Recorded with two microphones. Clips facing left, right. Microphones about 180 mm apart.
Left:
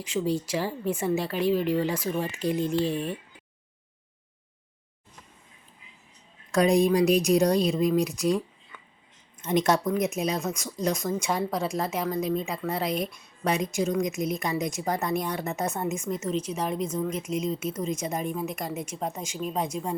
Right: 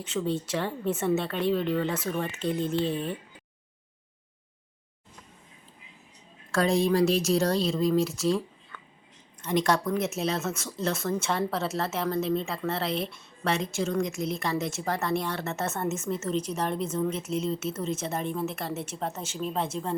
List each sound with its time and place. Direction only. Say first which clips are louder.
0.5 s a woman's voice: left 1 dB; centre (ahead or behind)
6.5 s speech: left 3 dB; 15° left (ahead or behind)